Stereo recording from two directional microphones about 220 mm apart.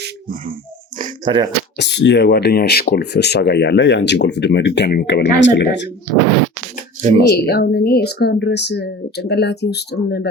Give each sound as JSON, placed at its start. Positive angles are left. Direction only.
{"t": 0.0, "sound": "a sound", "side_deg": -40}
{"t": 1.8, "sound": "speech", "side_deg": 50}
{"t": 7.2, "sound": "speech", "side_deg": 45}